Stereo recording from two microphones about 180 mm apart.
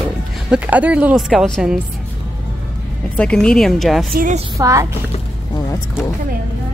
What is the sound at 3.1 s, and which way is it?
Speech, 5° left (ahead or behind).